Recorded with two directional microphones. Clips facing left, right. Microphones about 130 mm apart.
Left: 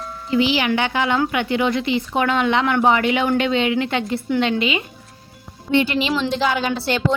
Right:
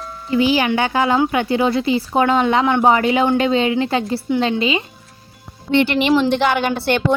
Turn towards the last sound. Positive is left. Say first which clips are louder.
# right 3 dB
turn(degrees=-55)  # may be behind; listen again after turning